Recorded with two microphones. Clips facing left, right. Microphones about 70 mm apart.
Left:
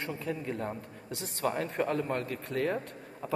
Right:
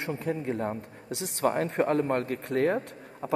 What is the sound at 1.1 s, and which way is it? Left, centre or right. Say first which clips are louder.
Speech: right 5 dB; left.